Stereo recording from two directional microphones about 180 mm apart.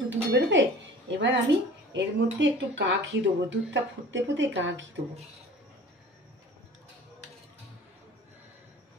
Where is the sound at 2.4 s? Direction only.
80° right.